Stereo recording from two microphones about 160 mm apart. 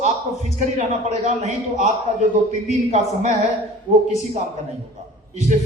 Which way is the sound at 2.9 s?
45° right (ahead or behind).